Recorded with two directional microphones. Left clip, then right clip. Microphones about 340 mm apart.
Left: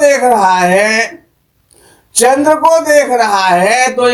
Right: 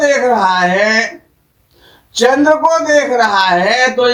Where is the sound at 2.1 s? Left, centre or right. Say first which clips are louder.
Left 1 dB; centre.